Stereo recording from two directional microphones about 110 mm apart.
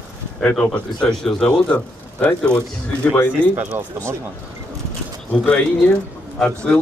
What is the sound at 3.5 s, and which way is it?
Speech, 15° right (ahead or behind).